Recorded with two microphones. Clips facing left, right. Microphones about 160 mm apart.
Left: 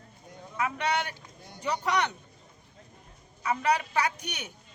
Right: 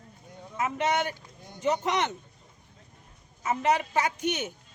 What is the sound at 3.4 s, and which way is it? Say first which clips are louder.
Speech: right 1 dB; 20° right (ahead or behind).